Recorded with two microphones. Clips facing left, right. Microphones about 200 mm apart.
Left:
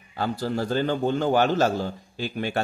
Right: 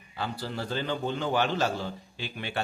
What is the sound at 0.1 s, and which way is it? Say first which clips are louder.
A man's voice: left 8 dB; 45° left (ahead or behind).